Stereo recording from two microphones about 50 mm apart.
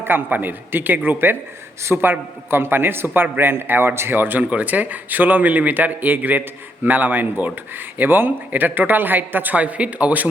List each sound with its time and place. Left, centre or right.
0.3 s speech: right
1.8 s a man's voice: right
4.4 s speech: right